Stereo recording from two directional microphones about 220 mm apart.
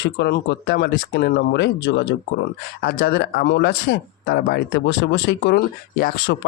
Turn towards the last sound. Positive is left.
turn(degrees=45)  # may be behind; listen again after turning